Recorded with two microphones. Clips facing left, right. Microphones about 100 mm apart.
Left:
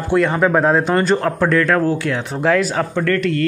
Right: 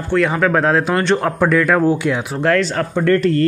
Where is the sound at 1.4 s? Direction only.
10° right (ahead or behind).